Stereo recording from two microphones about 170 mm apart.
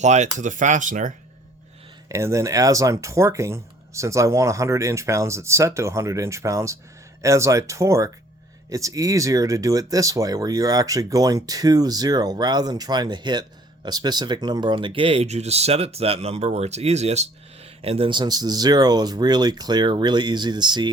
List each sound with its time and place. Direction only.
0.0 s speech: 45° right (ahead or behind)
2.0 s speech: 15° right (ahead or behind)